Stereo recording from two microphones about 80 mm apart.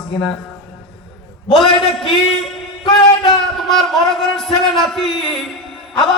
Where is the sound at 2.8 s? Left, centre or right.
Left.